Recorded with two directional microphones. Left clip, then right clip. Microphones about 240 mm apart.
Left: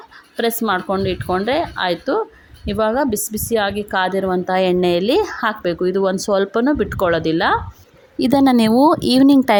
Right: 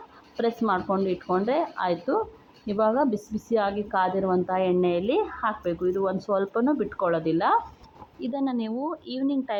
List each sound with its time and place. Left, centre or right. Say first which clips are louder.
0.7 s speech: left 6 dB; left
8.2 s speech: left 15 dB; left